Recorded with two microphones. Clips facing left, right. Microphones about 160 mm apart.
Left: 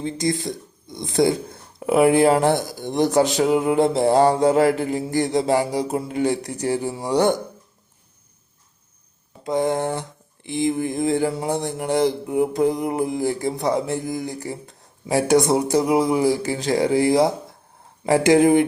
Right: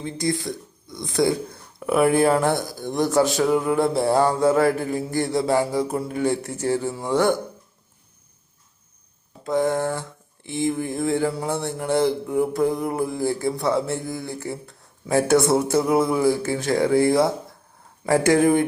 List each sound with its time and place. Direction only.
0.0 s speech: 20° left (ahead or behind)
9.4 s a sound: 15° left (ahead or behind)
18.0 s speech: 20° left (ahead or behind)